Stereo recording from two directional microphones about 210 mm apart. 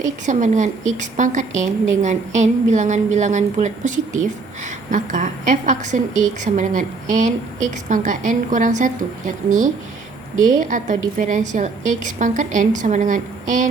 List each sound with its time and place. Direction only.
0.3 s a woman's voice: 35° right (ahead or behind)